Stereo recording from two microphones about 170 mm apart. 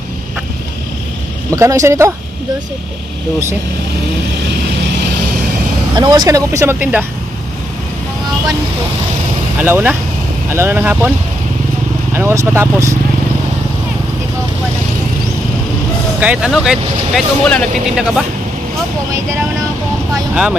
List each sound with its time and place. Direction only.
1.5 s speech: 20° right (ahead or behind)
5.9 s speech: 25° right (ahead or behind)
9.6 s speech: 10° right (ahead or behind)
12.1 s speech: 15° right (ahead or behind)
16.2 s speech: 5° right (ahead or behind)